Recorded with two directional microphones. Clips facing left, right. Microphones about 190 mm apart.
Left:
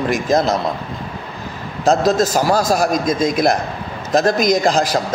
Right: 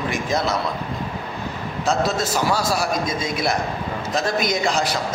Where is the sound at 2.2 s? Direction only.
40° left (ahead or behind).